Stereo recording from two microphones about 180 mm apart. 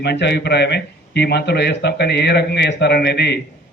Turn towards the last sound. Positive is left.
turn(degrees=65)  # may be behind; listen again after turning